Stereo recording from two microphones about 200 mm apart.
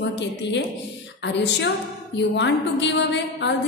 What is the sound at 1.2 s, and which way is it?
A woman's voice, 60° left (ahead or behind).